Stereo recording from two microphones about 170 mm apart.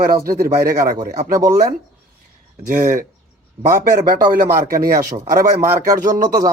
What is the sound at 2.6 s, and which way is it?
A man's voice, 50° right (ahead or behind).